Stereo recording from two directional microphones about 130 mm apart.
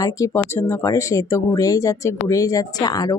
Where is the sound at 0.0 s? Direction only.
25° left (ahead or behind).